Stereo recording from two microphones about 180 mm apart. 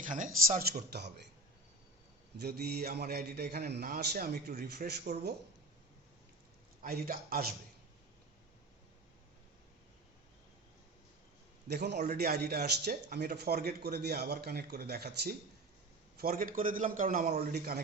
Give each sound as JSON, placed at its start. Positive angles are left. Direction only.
{"t": 0.1, "sound": "a man's voice", "side_deg": -50}
{"t": 0.9, "sound": "speech", "side_deg": -65}
{"t": 2.4, "sound": "speech", "side_deg": -60}
{"t": 6.8, "sound": "speech", "side_deg": -55}
{"t": 11.7, "sound": "a man's voice", "side_deg": -65}